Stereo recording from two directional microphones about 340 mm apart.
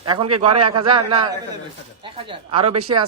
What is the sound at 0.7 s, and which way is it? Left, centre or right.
Speech, centre.